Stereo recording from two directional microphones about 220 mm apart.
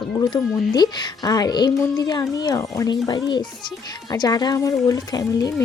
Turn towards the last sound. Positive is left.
turn(degrees=15)  # may be behind; listen again after turning